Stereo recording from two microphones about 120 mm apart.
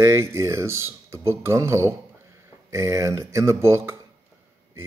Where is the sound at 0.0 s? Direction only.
25° right (ahead or behind).